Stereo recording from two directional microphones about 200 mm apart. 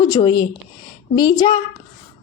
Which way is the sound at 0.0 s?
20° left (ahead or behind).